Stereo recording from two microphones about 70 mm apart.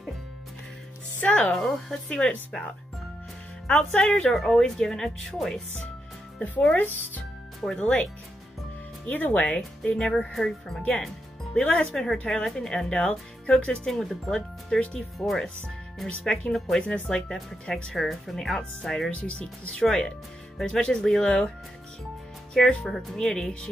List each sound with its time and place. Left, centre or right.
1.2 s speech: centre
3.6 s speech: left
4.0 s speech: centre
6.7 s speech: left
7.6 s speech: centre
9.8 s speech: centre
13.8 s speech: centre
22.5 s speech: centre